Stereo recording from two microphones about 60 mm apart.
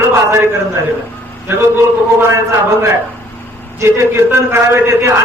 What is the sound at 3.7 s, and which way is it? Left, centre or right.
A man's voice, right.